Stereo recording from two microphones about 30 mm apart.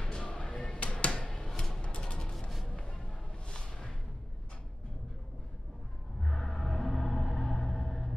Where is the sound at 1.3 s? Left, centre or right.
Centre.